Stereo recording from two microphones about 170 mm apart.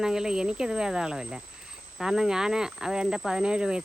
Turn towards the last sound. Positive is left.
turn(degrees=-5)  # may be behind; listen again after turning